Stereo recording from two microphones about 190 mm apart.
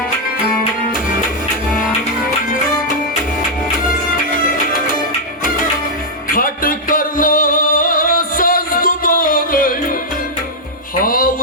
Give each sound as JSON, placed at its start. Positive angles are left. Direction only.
{"t": 6.2, "sound": "music", "side_deg": 45}
{"t": 10.9, "sound": "music", "side_deg": 50}